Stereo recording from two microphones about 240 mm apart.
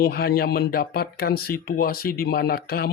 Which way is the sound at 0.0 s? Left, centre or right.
Left.